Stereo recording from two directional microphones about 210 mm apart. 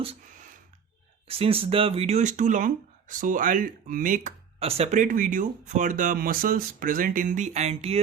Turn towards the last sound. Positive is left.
turn(degrees=-30)  # may be behind; listen again after turning